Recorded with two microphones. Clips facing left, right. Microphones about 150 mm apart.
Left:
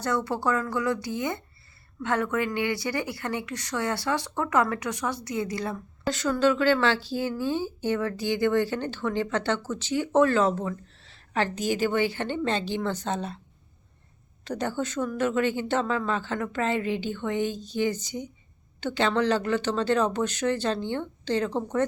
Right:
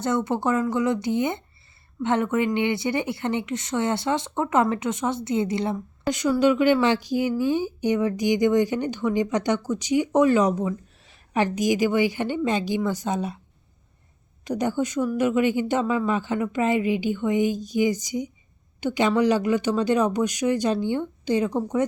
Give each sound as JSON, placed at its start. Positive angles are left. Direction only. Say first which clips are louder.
{"t": 0.0, "sound": "speech", "louder": "right 3 dB", "side_deg": -20}
{"t": 14.4, "sound": "speech", "louder": "right 5 dB", "side_deg": -15}